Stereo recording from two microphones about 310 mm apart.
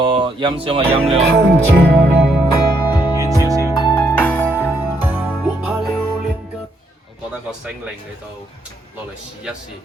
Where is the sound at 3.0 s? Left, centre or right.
Centre.